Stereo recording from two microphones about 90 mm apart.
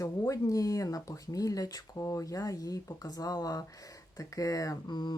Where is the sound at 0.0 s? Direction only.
35° left (ahead or behind).